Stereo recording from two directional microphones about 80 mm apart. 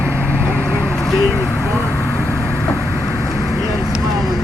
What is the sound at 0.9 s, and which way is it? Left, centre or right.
Vehicle, centre.